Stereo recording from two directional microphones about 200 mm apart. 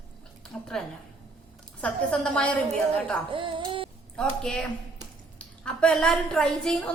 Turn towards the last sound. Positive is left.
turn(degrees=5)  # may be behind; listen again after turning